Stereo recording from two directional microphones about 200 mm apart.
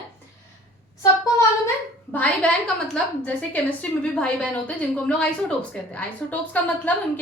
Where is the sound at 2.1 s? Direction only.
5° left (ahead or behind).